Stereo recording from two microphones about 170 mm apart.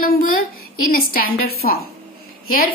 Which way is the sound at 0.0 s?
55° left (ahead or behind).